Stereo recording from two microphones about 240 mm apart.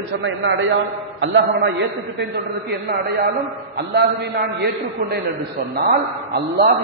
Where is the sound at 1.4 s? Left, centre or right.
Right.